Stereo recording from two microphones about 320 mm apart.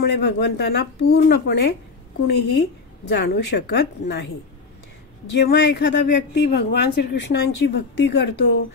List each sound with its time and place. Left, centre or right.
0.0 s speech: left
5.4 s speech: left